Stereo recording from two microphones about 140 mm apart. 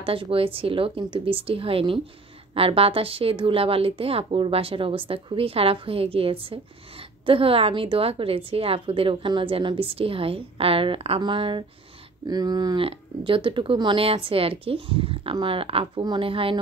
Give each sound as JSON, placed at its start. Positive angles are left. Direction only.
{"t": 0.0, "sound": "a woman's voice", "side_deg": -40}